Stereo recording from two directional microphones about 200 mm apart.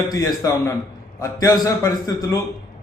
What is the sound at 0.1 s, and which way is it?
A man's voice, 15° left (ahead or behind).